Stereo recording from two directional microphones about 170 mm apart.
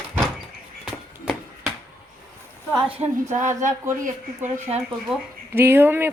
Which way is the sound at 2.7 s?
10° right (ahead or behind).